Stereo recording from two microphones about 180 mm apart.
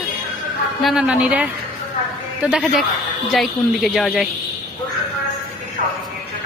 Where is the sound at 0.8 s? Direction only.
5° right (ahead or behind).